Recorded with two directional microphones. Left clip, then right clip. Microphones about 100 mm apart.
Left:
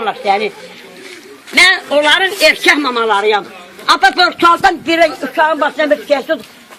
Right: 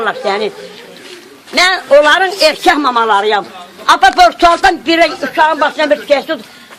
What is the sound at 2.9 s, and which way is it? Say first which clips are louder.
A woman's voice: right 2 dB; 35° right (ahead or behind).